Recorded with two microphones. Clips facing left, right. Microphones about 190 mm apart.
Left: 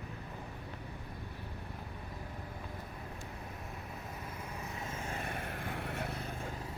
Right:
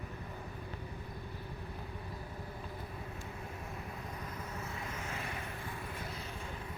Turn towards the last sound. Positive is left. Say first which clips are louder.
# left 4 dB
turn(degrees=70)  # may be behind; listen again after turning